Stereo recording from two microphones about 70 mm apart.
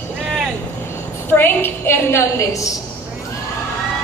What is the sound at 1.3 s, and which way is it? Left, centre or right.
A woman's voice, left.